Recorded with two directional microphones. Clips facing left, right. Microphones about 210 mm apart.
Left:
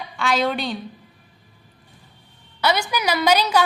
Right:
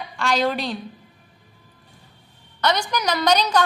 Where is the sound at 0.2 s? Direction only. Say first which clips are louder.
Even; centre (ahead or behind).